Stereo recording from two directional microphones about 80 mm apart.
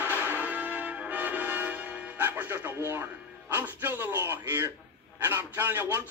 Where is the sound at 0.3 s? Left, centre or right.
Right.